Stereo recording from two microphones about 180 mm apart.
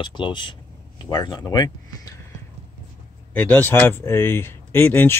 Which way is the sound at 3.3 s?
10° left (ahead or behind).